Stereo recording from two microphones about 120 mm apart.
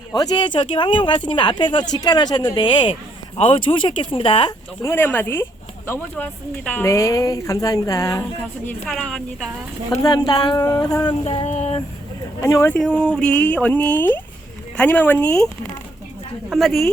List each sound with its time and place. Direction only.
0.1 s speech: 40° left (ahead or behind)
4.9 s speech: 15° left (ahead or behind)
6.9 s a sound: 25° left (ahead or behind)
8.9 s a woman's voice: centre (ahead or behind)
9.9 s speech: 35° left (ahead or behind)
11.2 s a sound: 55° left (ahead or behind)
12.4 s a sound: 25° left (ahead or behind)
12.7 s speech: 10° left (ahead or behind)
16.5 s a woman's voice: centre (ahead or behind)